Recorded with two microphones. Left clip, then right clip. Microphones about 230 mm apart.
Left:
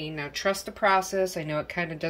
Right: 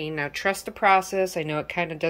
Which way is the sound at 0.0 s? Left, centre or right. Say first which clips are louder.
Right 3 dB; centre.